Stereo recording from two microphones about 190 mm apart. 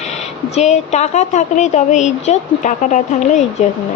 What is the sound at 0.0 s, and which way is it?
Speech, 35° left (ahead or behind).